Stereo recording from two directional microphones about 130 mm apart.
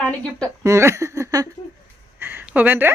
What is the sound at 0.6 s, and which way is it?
Speech, 20° right (ahead or behind).